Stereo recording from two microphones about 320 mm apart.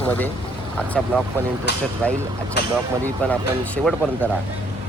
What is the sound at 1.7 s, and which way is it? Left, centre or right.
Speech, left.